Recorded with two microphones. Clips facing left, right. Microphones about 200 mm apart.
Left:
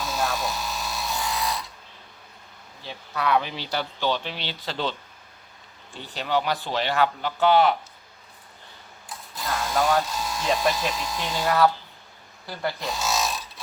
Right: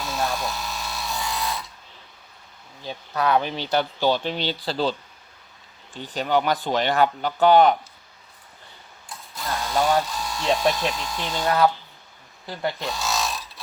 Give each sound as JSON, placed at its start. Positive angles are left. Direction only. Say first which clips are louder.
{"t": 0.0, "sound": "electric toothbrush", "louder": "even", "side_deg": 0}
{"t": 2.8, "sound": "speech", "louder": "right 4 dB", "side_deg": -40}
{"t": 6.1, "sound": "speech", "louder": "right 3 dB", "side_deg": -45}
{"t": 9.3, "sound": "mechanisms", "louder": "right 1 dB", "side_deg": 0}
{"t": 10.0, "sound": "speech", "louder": "even", "side_deg": 0}
{"t": 11.4, "sound": "speech", "louder": "right 1 dB", "side_deg": -20}
{"t": 12.7, "sound": "a sound", "louder": "even", "side_deg": 0}